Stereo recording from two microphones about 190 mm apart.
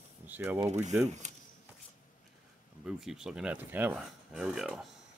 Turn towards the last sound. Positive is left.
turn(degrees=0)  # may be behind; listen again after turning